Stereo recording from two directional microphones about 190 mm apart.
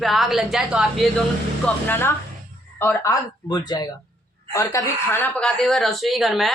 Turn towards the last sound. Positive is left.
turn(degrees=0)  # may be behind; listen again after turning